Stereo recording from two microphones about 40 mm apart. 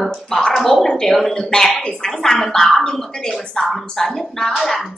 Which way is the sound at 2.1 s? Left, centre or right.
Centre.